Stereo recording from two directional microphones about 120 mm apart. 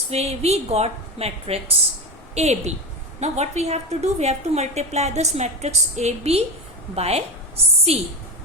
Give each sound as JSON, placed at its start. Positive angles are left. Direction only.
{"t": 0.1, "sound": "a woman's voice", "side_deg": -60}
{"t": 2.3, "sound": "a woman's voice", "side_deg": -65}